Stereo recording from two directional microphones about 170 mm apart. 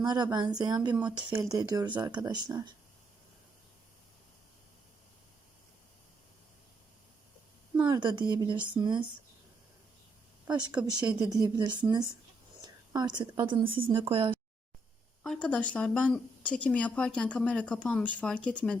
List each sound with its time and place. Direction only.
0.0 s speech: 25° right (ahead or behind)
7.9 s speech: 25° right (ahead or behind)
10.4 s speech: 25° right (ahead or behind)
10.8 s speech: 5° right (ahead or behind)
11.3 s speech: 25° right (ahead or behind)
12.6 s whispering: 25° right (ahead or behind)
13.3 s speech: 30° right (ahead or behind)
15.2 s speech: 5° left (ahead or behind)